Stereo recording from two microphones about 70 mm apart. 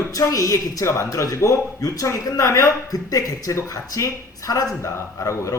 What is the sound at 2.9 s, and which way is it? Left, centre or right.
Speech, left.